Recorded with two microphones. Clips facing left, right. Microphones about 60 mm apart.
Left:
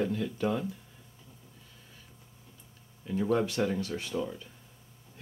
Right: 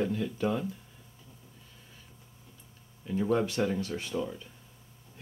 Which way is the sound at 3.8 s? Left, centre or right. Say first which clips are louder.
Even; right.